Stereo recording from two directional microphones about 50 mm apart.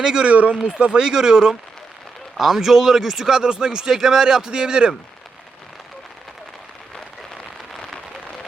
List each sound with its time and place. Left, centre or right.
0.0 s speech: centre
0.3 s speech: right
0.9 s speech: centre
6.9 s a sound: centre